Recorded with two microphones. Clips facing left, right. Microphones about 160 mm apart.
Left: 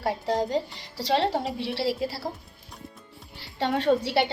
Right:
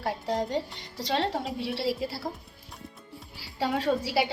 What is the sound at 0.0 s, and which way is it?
A woman's voice, centre (ahead or behind).